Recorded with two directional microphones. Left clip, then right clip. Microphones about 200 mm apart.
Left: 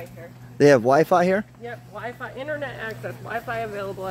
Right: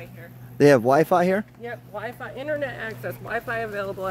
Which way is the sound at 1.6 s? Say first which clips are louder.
Right 1 dB; 40° right (ahead or behind).